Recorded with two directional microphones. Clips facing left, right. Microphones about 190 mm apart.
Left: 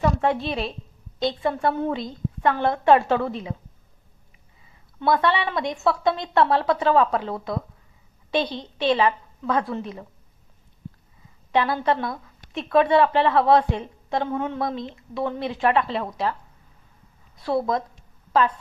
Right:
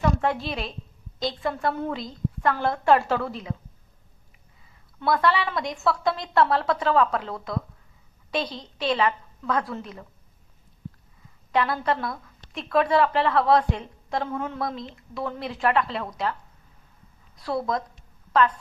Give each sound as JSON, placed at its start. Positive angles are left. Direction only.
{"t": 0.2, "sound": "a woman's voice", "side_deg": 25}
{"t": 5.0, "sound": "a woman's voice", "side_deg": 25}
{"t": 11.5, "sound": "a woman's voice", "side_deg": 25}
{"t": 17.4, "sound": "a woman's voice", "side_deg": 25}